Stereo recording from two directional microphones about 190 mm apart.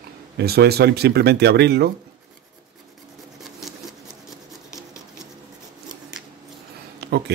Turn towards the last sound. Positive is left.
turn(degrees=-60)  # may be behind; listen again after turning